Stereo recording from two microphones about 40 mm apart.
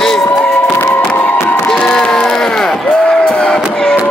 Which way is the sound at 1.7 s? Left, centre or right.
Centre.